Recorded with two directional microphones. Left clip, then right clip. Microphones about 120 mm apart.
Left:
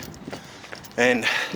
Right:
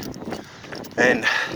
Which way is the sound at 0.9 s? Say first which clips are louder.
Right 2 dB; 5° left (ahead or behind).